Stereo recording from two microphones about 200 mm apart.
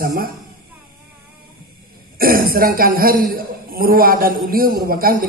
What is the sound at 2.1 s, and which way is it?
A man's voice, 45° right (ahead or behind).